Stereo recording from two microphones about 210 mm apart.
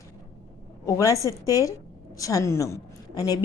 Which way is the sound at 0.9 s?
15° left (ahead or behind).